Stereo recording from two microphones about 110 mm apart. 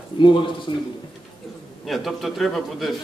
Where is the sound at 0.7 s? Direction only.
50° left (ahead or behind).